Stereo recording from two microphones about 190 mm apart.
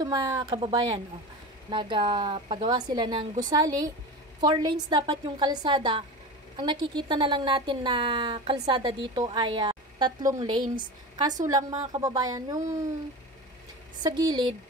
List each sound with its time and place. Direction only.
0.0 s a woman's voice: 20° right (ahead or behind)
14.0 s a woman's voice: 20° right (ahead or behind)